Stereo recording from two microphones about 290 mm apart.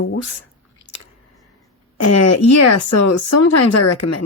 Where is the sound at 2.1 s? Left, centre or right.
Left.